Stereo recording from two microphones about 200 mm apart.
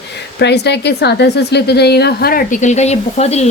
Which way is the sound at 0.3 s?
60° left (ahead or behind).